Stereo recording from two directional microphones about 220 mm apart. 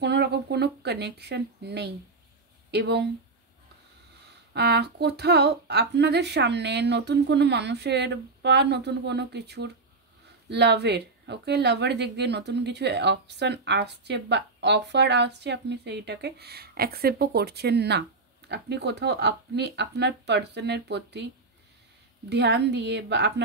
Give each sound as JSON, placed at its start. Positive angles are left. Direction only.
{"t": 0.0, "sound": "a woman's voice", "side_deg": -50}
{"t": 4.6, "sound": "a woman's voice", "side_deg": -50}
{"t": 22.3, "sound": "a woman's voice", "side_deg": -50}